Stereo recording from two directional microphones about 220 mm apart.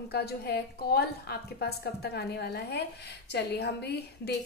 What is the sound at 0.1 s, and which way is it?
A woman's voice, 45° left (ahead or behind).